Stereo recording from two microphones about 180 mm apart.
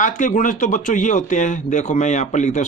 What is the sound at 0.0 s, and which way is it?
Speech, 45° left (ahead or behind).